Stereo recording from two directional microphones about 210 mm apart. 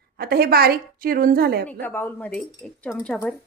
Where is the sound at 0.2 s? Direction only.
50° right (ahead or behind).